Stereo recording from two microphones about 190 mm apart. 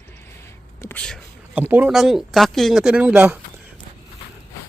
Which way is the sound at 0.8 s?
10° left (ahead or behind).